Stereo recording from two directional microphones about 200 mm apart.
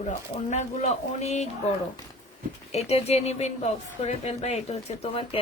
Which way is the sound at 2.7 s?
30° left (ahead or behind).